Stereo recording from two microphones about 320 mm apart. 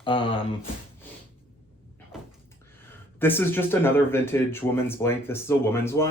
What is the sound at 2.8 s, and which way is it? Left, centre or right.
Speech, centre.